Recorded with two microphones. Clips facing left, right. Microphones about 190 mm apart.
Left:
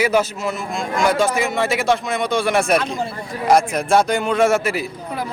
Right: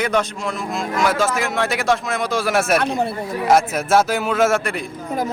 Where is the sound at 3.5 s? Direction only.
5° right (ahead or behind).